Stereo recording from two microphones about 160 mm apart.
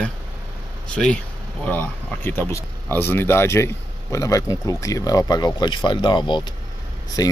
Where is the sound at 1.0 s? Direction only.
Centre (ahead or behind); by 7.3 s 25° left (ahead or behind).